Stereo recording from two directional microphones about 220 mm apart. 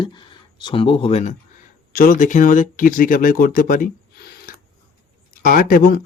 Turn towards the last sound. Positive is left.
turn(degrees=40)  # may be behind; listen again after turning